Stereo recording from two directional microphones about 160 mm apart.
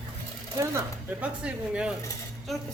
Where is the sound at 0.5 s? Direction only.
15° right (ahead or behind).